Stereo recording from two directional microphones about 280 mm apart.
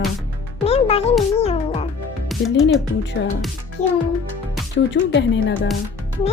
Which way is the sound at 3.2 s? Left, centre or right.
Left.